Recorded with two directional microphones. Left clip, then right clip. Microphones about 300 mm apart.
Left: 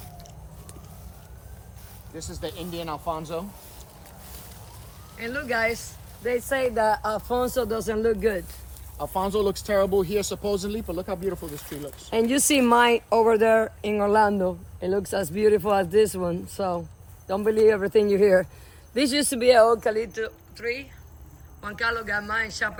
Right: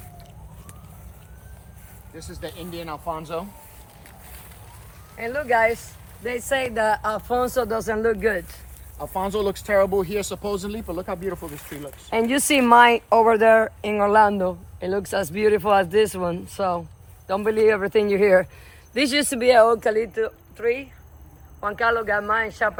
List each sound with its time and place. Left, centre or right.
2.1 s speech: centre
5.2 s speech: right
6.9 s speech: right
7.3 s speech: centre
19.5 s speech: right
21.6 s speech: centre